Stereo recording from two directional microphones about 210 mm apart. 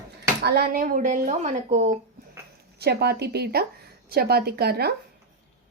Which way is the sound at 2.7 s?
50° right (ahead or behind).